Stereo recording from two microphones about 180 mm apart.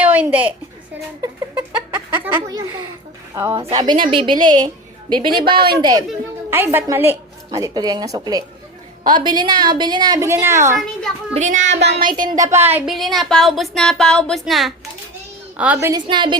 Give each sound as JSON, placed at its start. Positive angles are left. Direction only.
{"t": 0.0, "sound": "a woman's voice", "side_deg": -10}
{"t": 2.3, "sound": "a woman's voice", "side_deg": -20}
{"t": 3.5, "sound": "a woman's voice", "side_deg": -35}
{"t": 5.5, "sound": "a woman's voice", "side_deg": -60}
{"t": 5.8, "sound": "a woman's voice", "side_deg": -20}
{"t": 10.8, "sound": "speech", "side_deg": 0}
{"t": 11.3, "sound": "child singing", "side_deg": -40}
{"t": 11.7, "sound": "child singing", "side_deg": -70}
{"t": 12.3, "sound": "a woman's voice", "side_deg": -20}
{"t": 12.9, "sound": "a woman's voice", "side_deg": 0}
{"t": 15.9, "sound": "a woman's voice", "side_deg": -25}